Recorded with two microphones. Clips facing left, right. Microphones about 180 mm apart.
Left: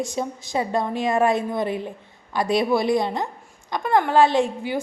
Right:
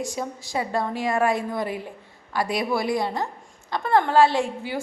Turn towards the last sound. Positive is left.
turn(degrees=20)  # may be behind; listen again after turning